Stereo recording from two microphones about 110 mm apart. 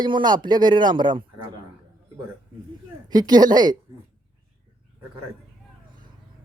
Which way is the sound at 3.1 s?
40° right (ahead or behind).